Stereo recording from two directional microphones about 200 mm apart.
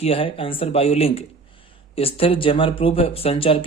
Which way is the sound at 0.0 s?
30° left (ahead or behind).